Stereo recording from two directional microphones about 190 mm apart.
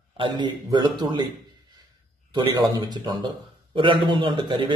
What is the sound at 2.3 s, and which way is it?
A man's voice, 25° right (ahead or behind).